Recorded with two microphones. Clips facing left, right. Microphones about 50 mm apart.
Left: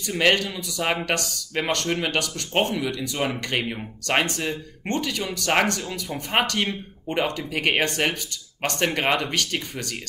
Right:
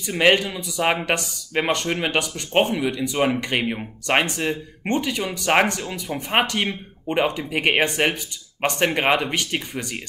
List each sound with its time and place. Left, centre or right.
0.0 s speech: centre